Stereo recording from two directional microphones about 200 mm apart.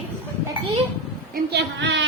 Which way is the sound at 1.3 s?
55° right (ahead or behind).